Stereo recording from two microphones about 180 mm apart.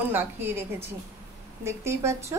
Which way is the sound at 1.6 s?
15° right (ahead or behind).